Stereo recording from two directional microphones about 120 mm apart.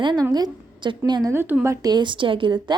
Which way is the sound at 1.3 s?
20° right (ahead or behind).